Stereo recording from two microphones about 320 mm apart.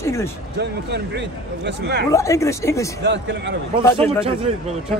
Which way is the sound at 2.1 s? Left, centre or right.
Centre.